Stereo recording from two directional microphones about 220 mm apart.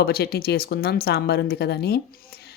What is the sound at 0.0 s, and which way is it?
Speech, 45° left (ahead or behind).